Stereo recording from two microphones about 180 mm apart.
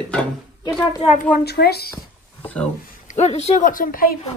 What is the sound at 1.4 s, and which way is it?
Speech, 65° left (ahead or behind).